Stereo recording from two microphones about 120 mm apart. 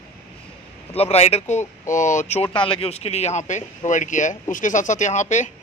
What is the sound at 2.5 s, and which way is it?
Speech, 45° left (ahead or behind).